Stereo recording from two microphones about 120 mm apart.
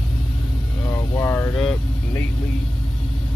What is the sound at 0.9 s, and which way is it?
Speech, 25° left (ahead or behind).